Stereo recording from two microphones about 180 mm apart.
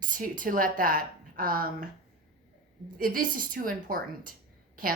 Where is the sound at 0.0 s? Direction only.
45° right (ahead or behind).